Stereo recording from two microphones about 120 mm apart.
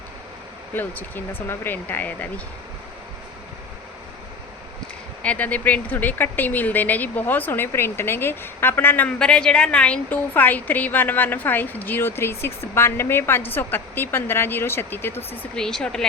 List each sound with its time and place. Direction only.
0.7 s speech: 15° left (ahead or behind)
5.2 s speech: 10° left (ahead or behind)
15.5 s speech: 5° left (ahead or behind)